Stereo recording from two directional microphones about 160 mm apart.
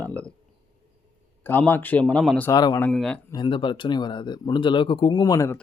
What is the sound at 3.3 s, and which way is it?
Speech, 30° left (ahead or behind).